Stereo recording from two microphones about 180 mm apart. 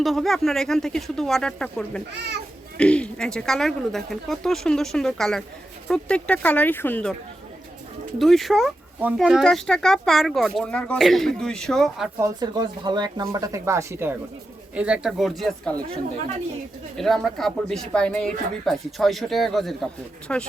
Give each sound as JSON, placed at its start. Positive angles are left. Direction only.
{"t": 0.0, "sound": "speech", "side_deg": 0}
{"t": 8.2, "sound": "speech", "side_deg": 0}
{"t": 12.2, "sound": "speech", "side_deg": -20}
{"t": 17.0, "sound": "speech", "side_deg": 0}